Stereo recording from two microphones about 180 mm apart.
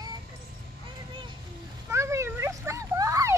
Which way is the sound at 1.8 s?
15° right (ahead or behind).